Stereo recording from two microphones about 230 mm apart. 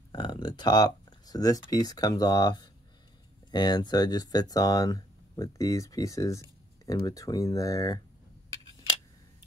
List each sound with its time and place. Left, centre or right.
0.1 s speech: centre